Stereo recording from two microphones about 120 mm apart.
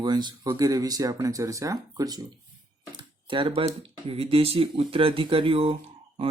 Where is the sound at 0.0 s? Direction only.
35° right (ahead or behind).